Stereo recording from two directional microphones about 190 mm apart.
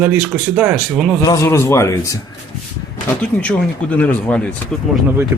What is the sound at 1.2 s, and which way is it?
Speech, 15° left (ahead or behind).